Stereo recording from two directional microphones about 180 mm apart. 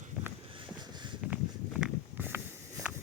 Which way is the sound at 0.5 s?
25° right (ahead or behind).